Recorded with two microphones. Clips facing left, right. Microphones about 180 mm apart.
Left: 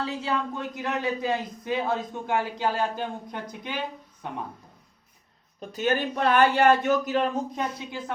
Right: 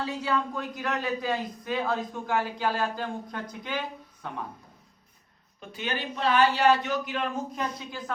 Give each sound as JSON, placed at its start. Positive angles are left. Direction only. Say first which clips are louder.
{"t": 0.0, "sound": "a man's voice", "louder": "even", "side_deg": 25}
{"t": 5.5, "sound": "a man's voice", "louder": "left 8 dB", "side_deg": 45}
{"t": 7.5, "sound": "a man's voice", "louder": "left 2 dB", "side_deg": 25}